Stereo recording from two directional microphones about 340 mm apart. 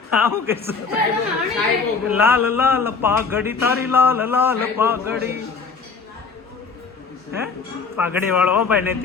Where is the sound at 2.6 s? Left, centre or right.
Centre.